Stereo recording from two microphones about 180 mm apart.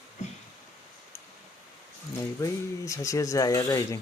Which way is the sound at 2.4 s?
15° left (ahead or behind).